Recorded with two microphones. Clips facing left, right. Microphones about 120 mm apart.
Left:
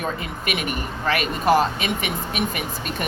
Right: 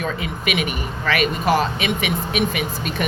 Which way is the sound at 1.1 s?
70° right (ahead or behind).